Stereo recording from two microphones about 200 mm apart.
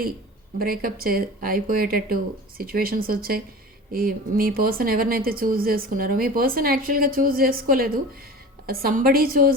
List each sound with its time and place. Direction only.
0.6 s speech: 45° right (ahead or behind)